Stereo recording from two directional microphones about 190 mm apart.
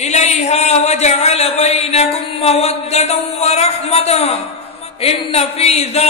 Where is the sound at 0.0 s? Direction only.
35° left (ahead or behind).